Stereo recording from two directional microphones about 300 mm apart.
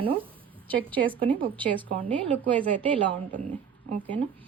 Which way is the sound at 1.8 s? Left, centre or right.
Centre.